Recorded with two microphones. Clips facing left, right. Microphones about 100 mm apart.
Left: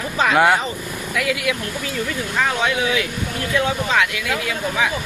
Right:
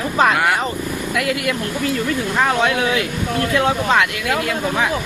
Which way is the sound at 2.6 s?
55° right (ahead or behind).